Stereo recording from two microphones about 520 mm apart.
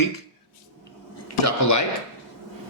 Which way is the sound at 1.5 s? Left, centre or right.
Left.